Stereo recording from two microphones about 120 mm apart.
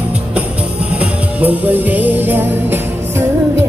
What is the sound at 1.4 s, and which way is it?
Music, 15° right (ahead or behind).